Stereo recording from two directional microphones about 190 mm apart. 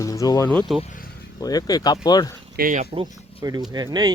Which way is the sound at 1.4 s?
20° left (ahead or behind).